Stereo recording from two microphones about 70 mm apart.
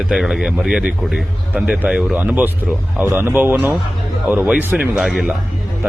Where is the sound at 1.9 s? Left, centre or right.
Centre.